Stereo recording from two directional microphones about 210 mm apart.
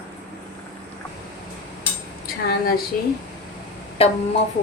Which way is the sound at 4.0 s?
30° left (ahead or behind).